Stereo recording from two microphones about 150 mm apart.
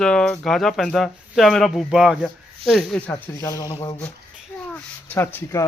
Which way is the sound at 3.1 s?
20° left (ahead or behind).